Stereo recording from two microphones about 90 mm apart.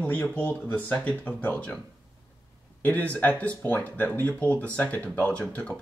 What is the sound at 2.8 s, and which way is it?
Speech, 15° left (ahead or behind).